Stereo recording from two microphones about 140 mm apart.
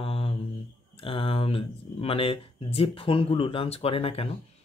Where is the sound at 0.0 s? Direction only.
40° left (ahead or behind).